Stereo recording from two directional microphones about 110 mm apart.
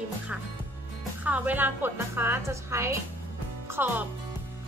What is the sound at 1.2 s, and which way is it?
A woman's voice, 15° right (ahead or behind).